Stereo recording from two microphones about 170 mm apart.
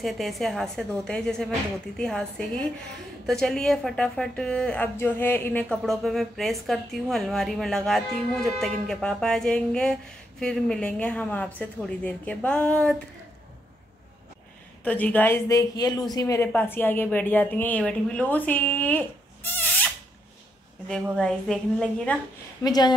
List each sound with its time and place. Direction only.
0.0 s a woman's voice: centre (ahead or behind)
14.8 s a woman's voice: 10° left (ahead or behind)
20.9 s a woman's voice: 5° left (ahead or behind)
22.6 s speech: 25° left (ahead or behind)